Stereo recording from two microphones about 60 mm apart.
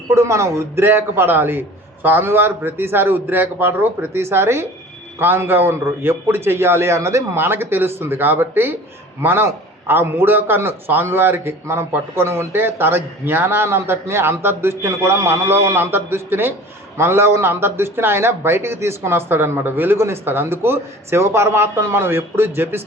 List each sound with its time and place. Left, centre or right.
0.1 s a man's voice: right
7.3 s a man's voice: right